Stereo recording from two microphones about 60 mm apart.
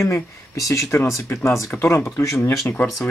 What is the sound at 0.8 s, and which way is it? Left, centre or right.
Speech, left.